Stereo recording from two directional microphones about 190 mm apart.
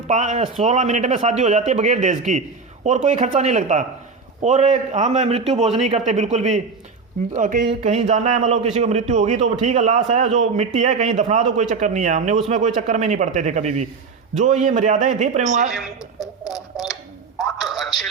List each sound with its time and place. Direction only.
0.1 s a man's voice: 40° right (ahead or behind)
16.6 s radio: centre (ahead or behind)